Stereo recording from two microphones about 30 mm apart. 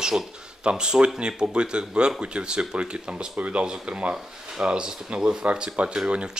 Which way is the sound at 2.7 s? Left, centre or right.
Right.